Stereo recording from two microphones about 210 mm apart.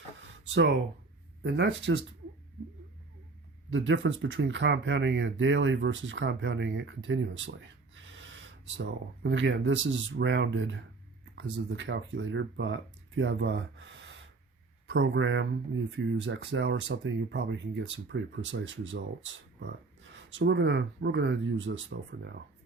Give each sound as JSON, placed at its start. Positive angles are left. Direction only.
{"t": 0.2, "sound": "a sound", "side_deg": -60}
{"t": 1.5, "sound": "speech", "side_deg": -60}
{"t": 3.7, "sound": "speech", "side_deg": -60}